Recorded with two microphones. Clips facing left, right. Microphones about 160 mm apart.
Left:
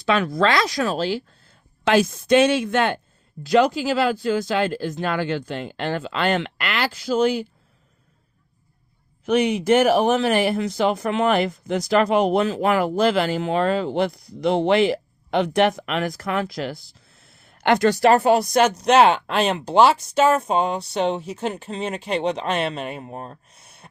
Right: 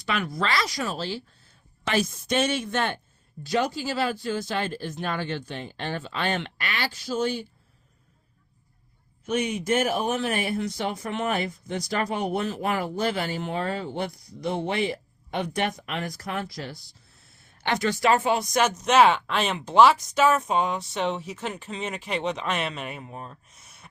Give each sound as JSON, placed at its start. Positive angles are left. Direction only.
{"t": 0.1, "sound": "speech", "side_deg": 90}
{"t": 1.9, "sound": "speech", "side_deg": 75}
{"t": 9.2, "sound": "speech", "side_deg": 70}
{"t": 18.3, "sound": "speech", "side_deg": 35}
{"t": 23.0, "sound": "speech", "side_deg": 45}